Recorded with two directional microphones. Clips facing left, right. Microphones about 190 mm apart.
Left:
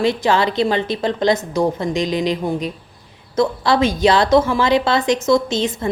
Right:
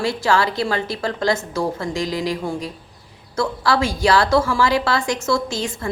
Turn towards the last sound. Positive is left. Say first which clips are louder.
# left 5 dB
turn(degrees=20)  # may be behind; listen again after turning